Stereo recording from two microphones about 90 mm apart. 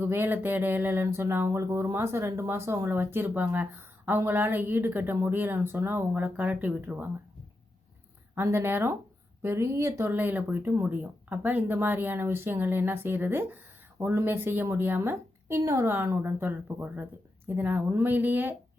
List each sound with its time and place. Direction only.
0.0 s a woman's voice: 25° right (ahead or behind)
8.4 s a woman's voice: 25° right (ahead or behind)
10.1 s a woman's voice: 20° right (ahead or behind)